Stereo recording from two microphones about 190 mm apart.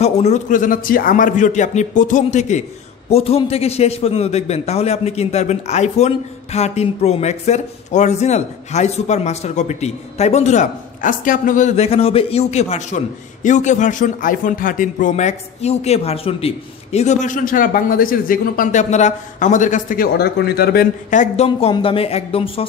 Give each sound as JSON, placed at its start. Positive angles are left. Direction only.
{"t": 0.0, "sound": "a man's voice", "side_deg": 35}